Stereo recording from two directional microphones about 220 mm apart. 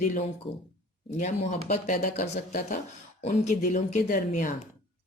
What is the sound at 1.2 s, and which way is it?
Speech, 30° left (ahead or behind).